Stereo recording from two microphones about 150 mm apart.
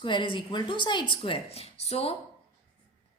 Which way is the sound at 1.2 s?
40° left (ahead or behind).